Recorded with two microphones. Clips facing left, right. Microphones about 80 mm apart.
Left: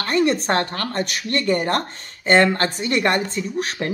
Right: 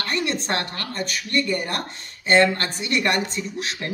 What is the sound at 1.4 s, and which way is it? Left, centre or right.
Speech, left.